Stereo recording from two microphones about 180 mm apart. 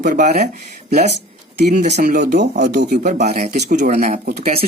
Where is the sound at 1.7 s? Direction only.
45° right (ahead or behind).